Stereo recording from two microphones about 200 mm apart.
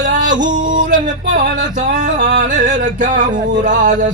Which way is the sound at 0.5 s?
40° right (ahead or behind).